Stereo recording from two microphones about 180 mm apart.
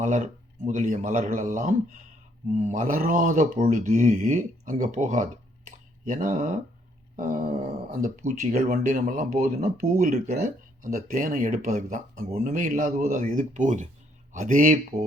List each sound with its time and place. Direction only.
0.0 s speech: 45° right (ahead or behind)